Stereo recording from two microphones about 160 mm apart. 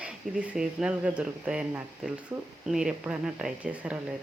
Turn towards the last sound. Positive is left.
turn(degrees=-10)  # may be behind; listen again after turning